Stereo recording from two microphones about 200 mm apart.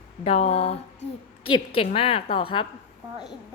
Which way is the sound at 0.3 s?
30° left (ahead or behind).